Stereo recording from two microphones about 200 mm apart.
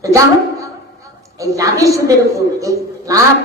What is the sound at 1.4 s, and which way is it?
A man's voice, 15° right (ahead or behind).